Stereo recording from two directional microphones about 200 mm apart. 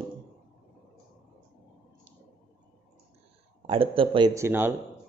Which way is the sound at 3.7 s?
25° right (ahead or behind).